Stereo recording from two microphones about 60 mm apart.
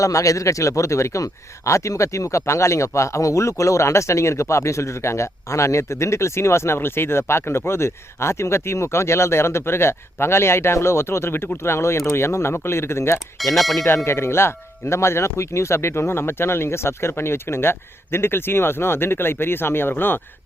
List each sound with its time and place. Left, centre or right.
0.0 s speech: left
13.1 s speech: centre
13.8 s speech: left